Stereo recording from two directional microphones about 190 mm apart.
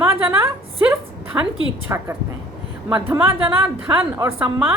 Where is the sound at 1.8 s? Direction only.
10° right (ahead or behind).